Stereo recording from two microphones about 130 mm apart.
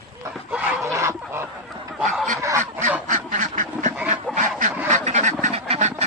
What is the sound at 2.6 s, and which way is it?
Goose, 65° right (ahead or behind).